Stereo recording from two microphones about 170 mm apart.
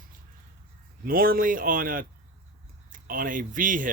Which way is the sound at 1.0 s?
60° right (ahead or behind).